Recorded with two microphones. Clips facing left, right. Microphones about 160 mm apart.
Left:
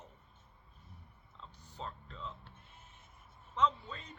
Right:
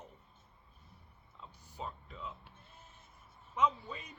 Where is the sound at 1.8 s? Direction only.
10° right (ahead or behind).